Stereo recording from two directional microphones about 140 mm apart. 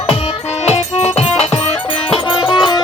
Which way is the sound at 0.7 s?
50° left (ahead or behind).